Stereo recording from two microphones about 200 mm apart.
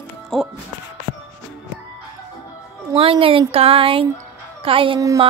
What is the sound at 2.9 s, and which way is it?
Speech, 30° right (ahead or behind).